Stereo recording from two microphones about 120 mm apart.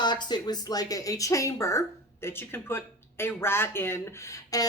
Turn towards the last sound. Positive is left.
turn(degrees=30)  # may be behind; listen again after turning